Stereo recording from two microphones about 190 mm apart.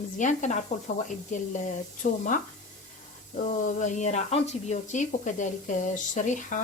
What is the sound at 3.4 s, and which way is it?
Speech, 40° left (ahead or behind).